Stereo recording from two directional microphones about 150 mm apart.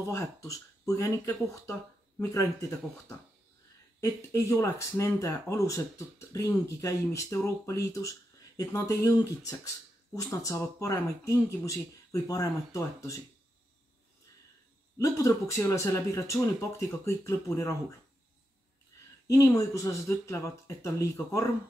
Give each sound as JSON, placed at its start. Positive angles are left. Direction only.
{"t": 0.0, "sound": "speech", "side_deg": 20}
{"t": 4.0, "sound": "speech", "side_deg": 20}
{"t": 15.0, "sound": "speech", "side_deg": 20}
{"t": 18.9, "sound": "a sound", "side_deg": 20}
{"t": 19.2, "sound": "speech", "side_deg": 20}